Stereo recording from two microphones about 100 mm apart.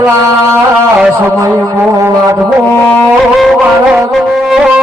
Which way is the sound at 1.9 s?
30° right (ahead or behind).